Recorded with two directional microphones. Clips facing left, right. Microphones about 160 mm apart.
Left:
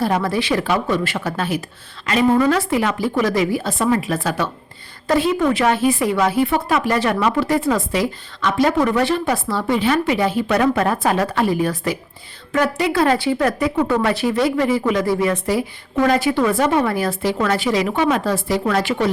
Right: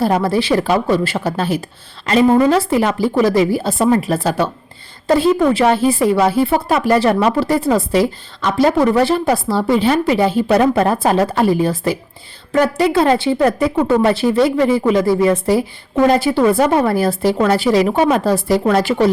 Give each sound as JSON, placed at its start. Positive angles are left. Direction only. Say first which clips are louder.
{"t": 0.0, "sound": "speech", "louder": "right 4 dB", "side_deg": -35}